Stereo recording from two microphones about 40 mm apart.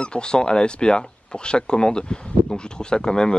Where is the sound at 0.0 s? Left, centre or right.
Left.